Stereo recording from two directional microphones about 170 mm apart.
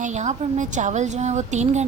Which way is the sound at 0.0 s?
45° right (ahead or behind).